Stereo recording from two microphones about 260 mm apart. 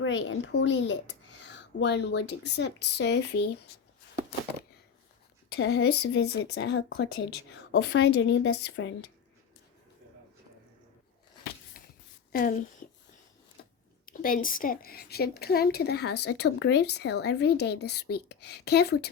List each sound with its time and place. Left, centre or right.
0.0 s a woman's voice: left
5.5 s a woman's voice: left
11.8 s a sound: left
12.3 s a woman's voice: left
14.0 s a woman's voice: left